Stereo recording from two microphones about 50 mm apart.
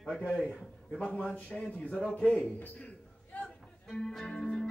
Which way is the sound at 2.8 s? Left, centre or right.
Left.